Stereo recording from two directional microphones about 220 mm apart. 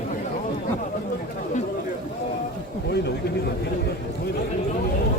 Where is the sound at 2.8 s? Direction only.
50° left (ahead or behind).